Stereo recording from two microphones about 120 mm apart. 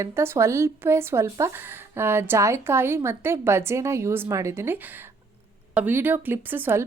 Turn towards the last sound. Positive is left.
turn(degrees=-15)  # may be behind; listen again after turning